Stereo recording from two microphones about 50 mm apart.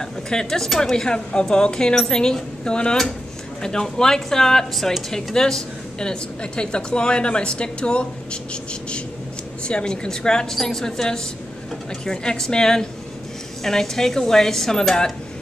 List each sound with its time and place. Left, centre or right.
0.0 s speech: centre
9.7 s speech: centre